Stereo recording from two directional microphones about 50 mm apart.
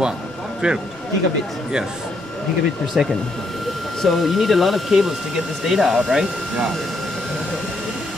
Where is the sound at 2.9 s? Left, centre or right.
Centre.